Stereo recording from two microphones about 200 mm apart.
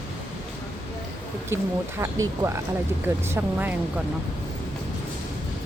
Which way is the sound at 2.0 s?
15° right (ahead or behind).